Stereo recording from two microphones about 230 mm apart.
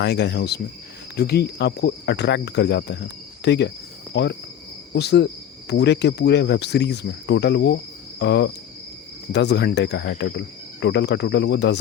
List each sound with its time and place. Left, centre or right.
0.0 s speech: left